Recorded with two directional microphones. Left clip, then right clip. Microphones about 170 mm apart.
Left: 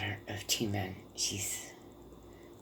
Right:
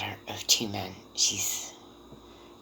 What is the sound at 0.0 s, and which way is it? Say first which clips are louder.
Speech: right 5 dB; 20° left (ahead or behind).